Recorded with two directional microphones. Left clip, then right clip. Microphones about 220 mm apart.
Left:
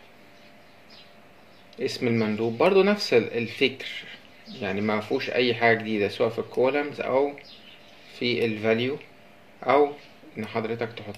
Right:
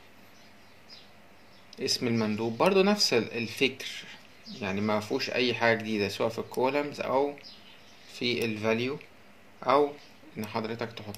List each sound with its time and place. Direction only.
1.8 s speech: 30° right (ahead or behind)